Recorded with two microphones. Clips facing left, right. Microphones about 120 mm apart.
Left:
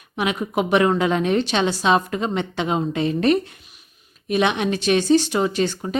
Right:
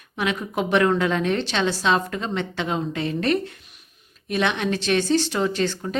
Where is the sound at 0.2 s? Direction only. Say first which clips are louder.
Left 3 dB; 15° left (ahead or behind).